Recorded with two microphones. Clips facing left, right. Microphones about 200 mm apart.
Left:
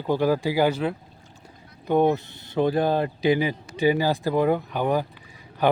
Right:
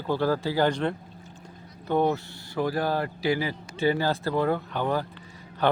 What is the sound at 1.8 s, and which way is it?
Speech, 15° left (ahead or behind).